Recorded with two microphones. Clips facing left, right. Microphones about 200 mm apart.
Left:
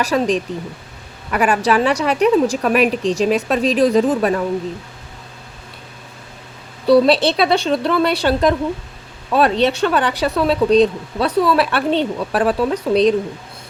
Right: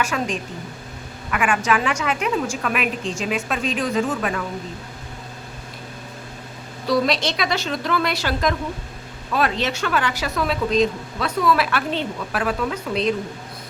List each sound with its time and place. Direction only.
0.0 s speech: 35° left (ahead or behind)
6.8 s speech: 30° left (ahead or behind)